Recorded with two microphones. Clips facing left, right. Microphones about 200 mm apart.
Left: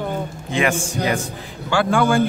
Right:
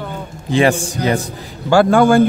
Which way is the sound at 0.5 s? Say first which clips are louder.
Right 6 dB; 35° right (ahead or behind).